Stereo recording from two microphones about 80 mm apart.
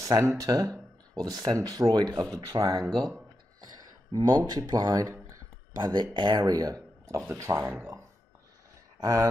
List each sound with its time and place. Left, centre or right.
0.0 s speech: right
2.3 s speech: right
4.1 s speech: right
5.8 s speech: right
6.1 s speech: right
6.4 s speech: right
9.0 s speech: right